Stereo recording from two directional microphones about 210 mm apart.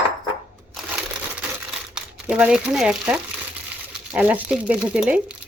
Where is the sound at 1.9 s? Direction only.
5° right (ahead or behind).